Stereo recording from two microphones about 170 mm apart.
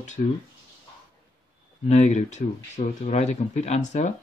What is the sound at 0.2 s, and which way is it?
Speech, 45° left (ahead or behind).